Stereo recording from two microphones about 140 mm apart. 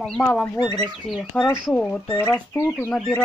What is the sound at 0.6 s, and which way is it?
Speech, 30° left (ahead or behind).